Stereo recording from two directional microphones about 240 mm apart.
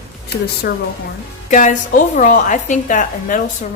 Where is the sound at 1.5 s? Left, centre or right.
Left.